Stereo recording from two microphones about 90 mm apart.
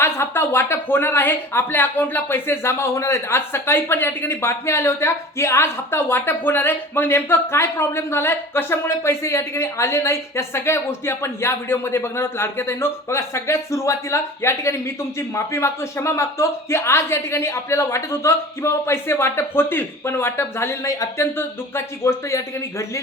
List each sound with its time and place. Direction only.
0.0 s speech: 25° left (ahead or behind)